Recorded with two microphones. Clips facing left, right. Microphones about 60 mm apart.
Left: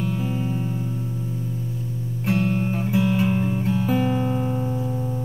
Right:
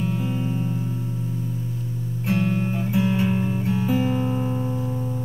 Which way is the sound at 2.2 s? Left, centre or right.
Centre.